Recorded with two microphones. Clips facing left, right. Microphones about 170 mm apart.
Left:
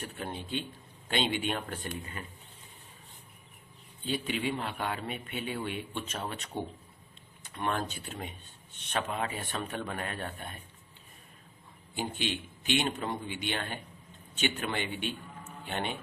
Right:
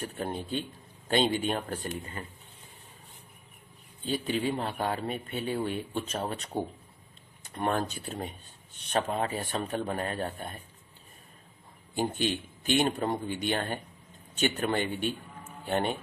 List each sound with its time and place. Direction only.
0.0 s a man's voice: 40° right (ahead or behind)
4.0 s a man's voice: 40° right (ahead or behind)
11.9 s a man's voice: 45° right (ahead or behind)